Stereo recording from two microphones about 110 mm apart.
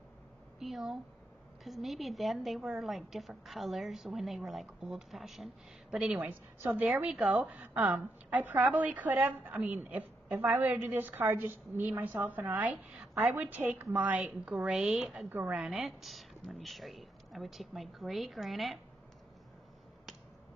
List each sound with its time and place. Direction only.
0.6 s a woman's voice: centre (ahead or behind)
15.2 s a woman's voice: 15° right (ahead or behind)
15.6 s a woman's voice: centre (ahead or behind)